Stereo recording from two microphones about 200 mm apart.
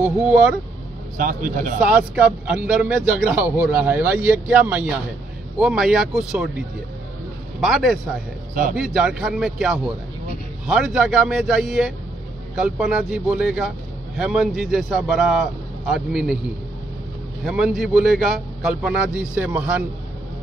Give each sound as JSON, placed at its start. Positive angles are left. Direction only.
{"t": 0.0, "sound": "speech", "side_deg": -5}
{"t": 1.1, "sound": "a man's voice", "side_deg": -40}
{"t": 1.8, "sound": "a man's voice", "side_deg": -5}
{"t": 7.6, "sound": "a man's voice", "side_deg": 0}
{"t": 17.6, "sound": "a man's voice", "side_deg": 0}